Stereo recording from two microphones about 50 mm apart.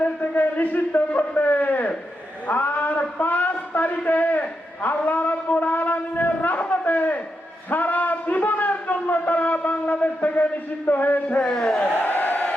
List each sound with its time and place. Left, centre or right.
0.0 s a man's voice: left
11.3 s a man's voice: centre
11.9 s crowd: left